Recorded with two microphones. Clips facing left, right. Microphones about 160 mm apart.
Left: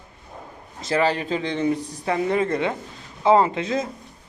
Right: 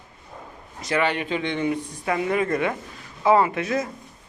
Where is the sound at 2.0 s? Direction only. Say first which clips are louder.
Left 1 dB; 30° left (ahead or behind).